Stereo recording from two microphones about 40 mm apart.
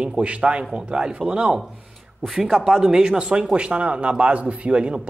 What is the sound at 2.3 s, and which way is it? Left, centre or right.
Speech, centre.